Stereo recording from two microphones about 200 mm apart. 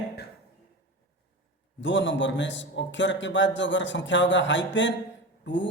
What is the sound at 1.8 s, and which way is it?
A man's voice, 65° left (ahead or behind).